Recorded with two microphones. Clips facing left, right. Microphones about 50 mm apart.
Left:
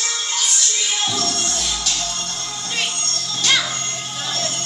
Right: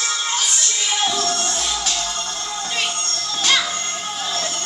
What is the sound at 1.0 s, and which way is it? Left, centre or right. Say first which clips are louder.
Music: right 2 dB; centre.